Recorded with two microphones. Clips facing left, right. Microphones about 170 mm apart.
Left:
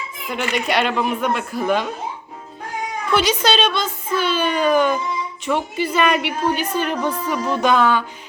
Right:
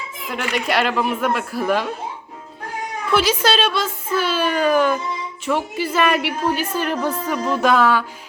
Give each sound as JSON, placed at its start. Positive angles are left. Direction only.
{"t": 0.3, "sound": "a woman's voice", "side_deg": 0}
{"t": 3.1, "sound": "a woman's voice", "side_deg": -5}